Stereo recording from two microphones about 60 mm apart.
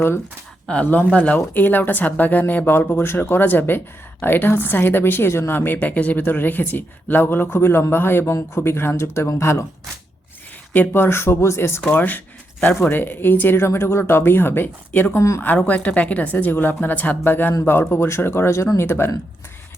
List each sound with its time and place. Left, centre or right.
0.7 s a woman's voice: left
8.3 s speech: left
10.7 s a woman's voice: left
11.8 s a woman's voice: left
15.6 s a woman's voice: left